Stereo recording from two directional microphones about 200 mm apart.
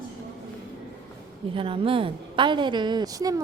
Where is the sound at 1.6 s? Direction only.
25° right (ahead or behind).